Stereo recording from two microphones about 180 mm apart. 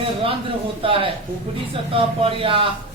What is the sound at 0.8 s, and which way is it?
A man's voice, 30° right (ahead or behind).